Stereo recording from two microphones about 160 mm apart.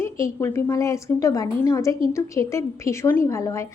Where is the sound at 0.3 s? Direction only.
20° left (ahead or behind).